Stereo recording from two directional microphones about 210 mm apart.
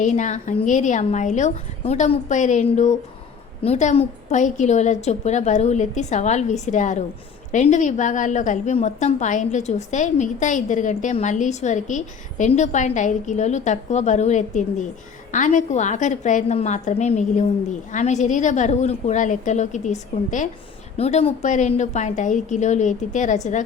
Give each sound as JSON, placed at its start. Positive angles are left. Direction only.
{"t": 0.0, "sound": "a woman's voice", "side_deg": 35}